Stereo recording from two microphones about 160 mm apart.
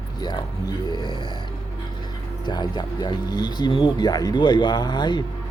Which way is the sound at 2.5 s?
25° left (ahead or behind).